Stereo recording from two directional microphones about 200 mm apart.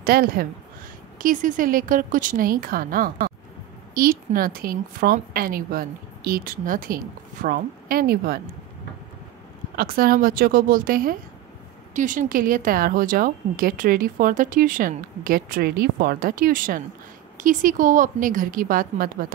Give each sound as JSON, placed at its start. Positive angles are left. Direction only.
{"t": 0.0, "sound": "a woman's voice", "side_deg": -45}
{"t": 9.8, "sound": "a woman's voice", "side_deg": -45}